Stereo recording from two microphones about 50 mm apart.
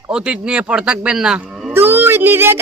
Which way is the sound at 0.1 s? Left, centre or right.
Centre.